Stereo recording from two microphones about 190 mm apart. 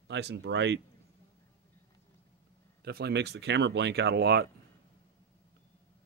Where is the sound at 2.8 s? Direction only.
55° right (ahead or behind).